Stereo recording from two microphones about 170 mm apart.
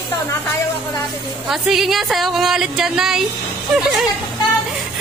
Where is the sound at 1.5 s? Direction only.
Centre (ahead or behind).